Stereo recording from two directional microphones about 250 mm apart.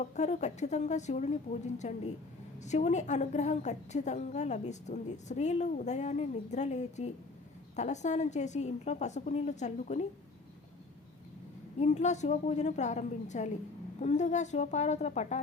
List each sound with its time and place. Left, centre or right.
0.0 s a woman's voice: left
11.8 s a woman's voice: left